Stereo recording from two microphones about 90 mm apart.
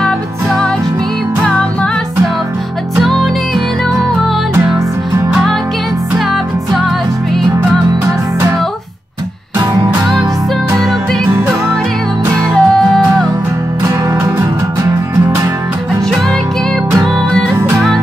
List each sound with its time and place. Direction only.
3.0 s music: centre (ahead or behind)
5.3 s music: centre (ahead or behind)
12.5 s music: 5° left (ahead or behind)
17.6 s music: 35° right (ahead or behind)